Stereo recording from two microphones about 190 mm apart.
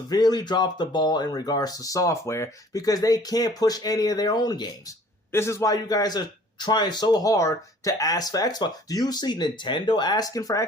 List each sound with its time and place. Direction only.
0.1 s a man's voice: 20° left (ahead or behind)